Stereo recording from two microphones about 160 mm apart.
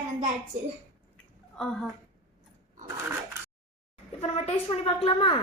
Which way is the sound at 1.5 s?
5° left (ahead or behind).